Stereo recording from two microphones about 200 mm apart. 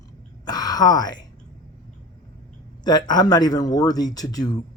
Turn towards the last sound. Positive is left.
turn(degrees=20)  # may be behind; listen again after turning